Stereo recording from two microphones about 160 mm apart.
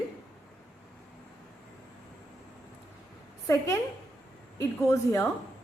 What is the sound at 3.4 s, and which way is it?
A woman's voice, 20° left (ahead or behind).